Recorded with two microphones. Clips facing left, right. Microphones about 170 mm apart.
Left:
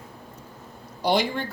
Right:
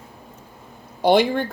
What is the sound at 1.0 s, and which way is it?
Speech, 55° right (ahead or behind).